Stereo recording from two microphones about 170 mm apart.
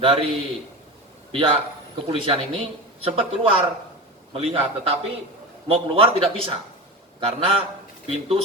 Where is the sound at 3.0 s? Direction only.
35° right (ahead or behind).